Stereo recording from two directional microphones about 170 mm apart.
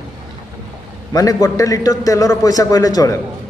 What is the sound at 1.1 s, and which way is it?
A man's voice, 20° left (ahead or behind).